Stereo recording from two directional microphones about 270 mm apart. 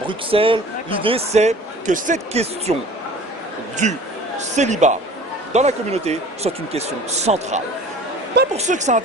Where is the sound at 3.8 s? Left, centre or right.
Right.